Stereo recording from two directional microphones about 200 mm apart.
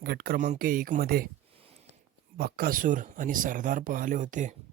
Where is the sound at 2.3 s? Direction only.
50° right (ahead or behind).